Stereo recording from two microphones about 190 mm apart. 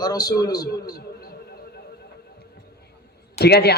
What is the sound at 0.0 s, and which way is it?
Speech, 20° left (ahead or behind).